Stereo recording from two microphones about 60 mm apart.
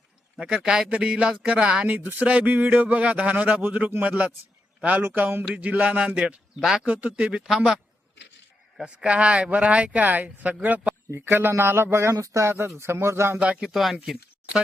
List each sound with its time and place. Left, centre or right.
0.3 s speech: centre
6.6 s speech: centre
6.8 s speech: right
7.4 s speech: centre
9.0 s speech: centre
11.1 s a man's voice: right
12.1 s speech: right
12.5 s a man's voice: right
13.4 s speech: centre
13.7 s speech: centre